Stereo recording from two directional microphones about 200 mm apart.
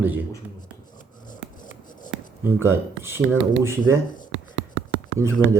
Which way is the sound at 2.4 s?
10° right (ahead or behind).